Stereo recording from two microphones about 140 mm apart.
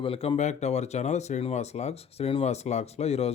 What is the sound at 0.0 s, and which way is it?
Speech, 40° left (ahead or behind).